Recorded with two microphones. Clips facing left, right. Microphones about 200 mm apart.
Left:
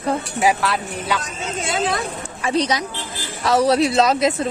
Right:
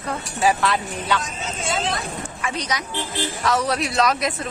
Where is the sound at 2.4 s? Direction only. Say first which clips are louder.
Left 8 dB; 30° left (ahead or behind).